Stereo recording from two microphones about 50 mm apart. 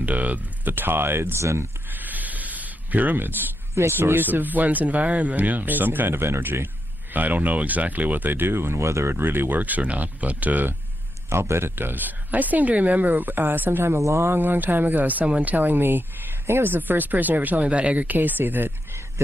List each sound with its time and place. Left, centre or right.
0.0 s speech: right
1.9 s a sound: right
3.9 s speech: right
8.8 s speech: right
9.1 s speech: right
11.2 s a man's voice: right
11.7 s speech: right
13.9 s speech: right
14.3 s speech: right
15.5 s speech: right